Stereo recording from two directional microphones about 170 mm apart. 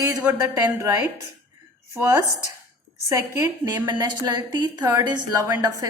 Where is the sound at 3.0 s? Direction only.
15° right (ahead or behind).